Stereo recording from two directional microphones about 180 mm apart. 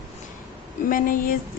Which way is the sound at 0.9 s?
50° left (ahead or behind).